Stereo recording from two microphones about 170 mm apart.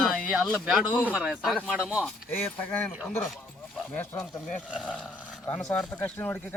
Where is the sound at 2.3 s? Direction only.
10° left (ahead or behind).